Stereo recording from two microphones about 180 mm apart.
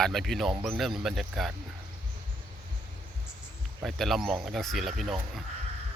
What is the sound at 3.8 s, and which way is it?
Speech, centre (ahead or behind).